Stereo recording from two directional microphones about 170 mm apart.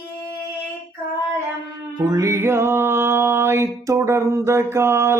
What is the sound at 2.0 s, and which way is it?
Music, 20° right (ahead or behind).